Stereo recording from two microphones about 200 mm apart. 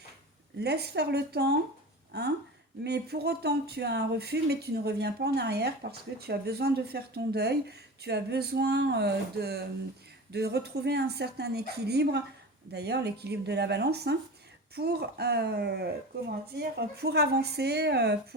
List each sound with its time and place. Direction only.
0.6 s speech: 55° right (ahead or behind)
2.8 s speech: 55° right (ahead or behind)